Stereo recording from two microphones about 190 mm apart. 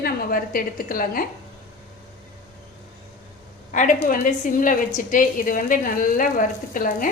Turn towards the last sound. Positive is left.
turn(degrees=45)  # may be behind; listen again after turning